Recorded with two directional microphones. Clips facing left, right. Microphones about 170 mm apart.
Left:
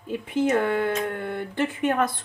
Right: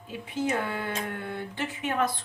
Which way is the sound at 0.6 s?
55° left (ahead or behind).